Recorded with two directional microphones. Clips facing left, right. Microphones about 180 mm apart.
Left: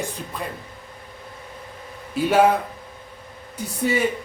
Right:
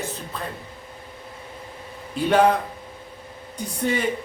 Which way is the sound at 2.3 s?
5° left (ahead or behind).